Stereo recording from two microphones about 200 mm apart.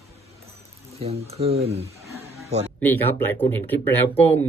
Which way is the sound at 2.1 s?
30° right (ahead or behind).